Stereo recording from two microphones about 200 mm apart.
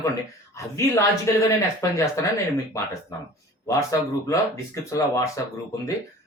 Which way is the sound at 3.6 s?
15° left (ahead or behind).